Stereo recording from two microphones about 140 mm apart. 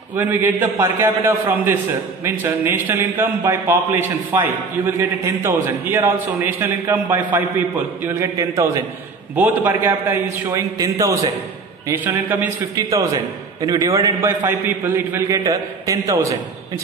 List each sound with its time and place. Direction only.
0.1 s a man's voice: 15° right (ahead or behind)